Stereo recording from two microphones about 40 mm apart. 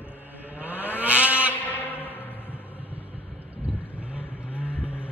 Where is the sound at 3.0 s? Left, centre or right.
Right.